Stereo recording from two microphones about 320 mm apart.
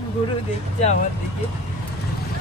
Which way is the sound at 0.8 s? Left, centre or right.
Left.